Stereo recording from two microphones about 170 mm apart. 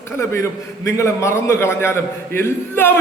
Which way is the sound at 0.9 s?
15° left (ahead or behind).